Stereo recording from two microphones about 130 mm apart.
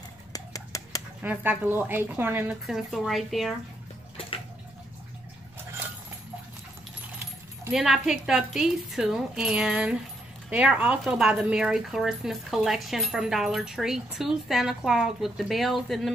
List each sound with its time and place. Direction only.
0.3 s a sound: 25° left (ahead or behind)
1.2 s a woman's voice: 15° right (ahead or behind)
2.6 s speech: centre (ahead or behind)
7.7 s speech: 5° right (ahead or behind)